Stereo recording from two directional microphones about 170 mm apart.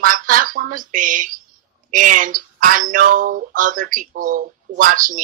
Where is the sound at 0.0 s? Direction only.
55° right (ahead or behind).